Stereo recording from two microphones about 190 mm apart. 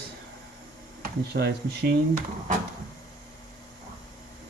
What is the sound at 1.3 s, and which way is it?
Speech, 60° right (ahead or behind).